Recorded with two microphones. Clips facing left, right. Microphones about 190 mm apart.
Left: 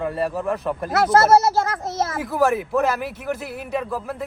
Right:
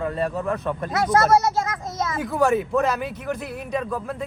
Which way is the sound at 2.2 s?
Centre (ahead or behind).